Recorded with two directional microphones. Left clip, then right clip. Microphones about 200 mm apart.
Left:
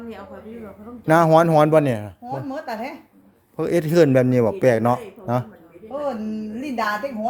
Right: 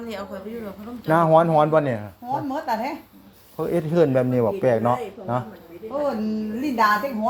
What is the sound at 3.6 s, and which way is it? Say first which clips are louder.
A man's voice: left 3 dB; 55° left (ahead or behind).